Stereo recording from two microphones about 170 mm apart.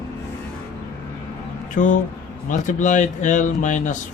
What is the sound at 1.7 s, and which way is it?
Speech, 50° left (ahead or behind).